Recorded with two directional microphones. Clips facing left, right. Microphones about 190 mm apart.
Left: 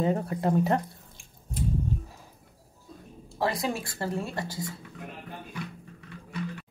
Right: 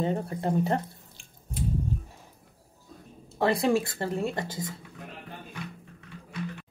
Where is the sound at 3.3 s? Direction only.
25° right (ahead or behind).